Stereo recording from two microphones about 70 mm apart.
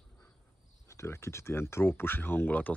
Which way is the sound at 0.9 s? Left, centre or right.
Left.